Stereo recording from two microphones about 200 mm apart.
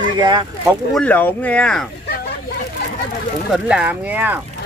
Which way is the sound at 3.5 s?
5° right (ahead or behind).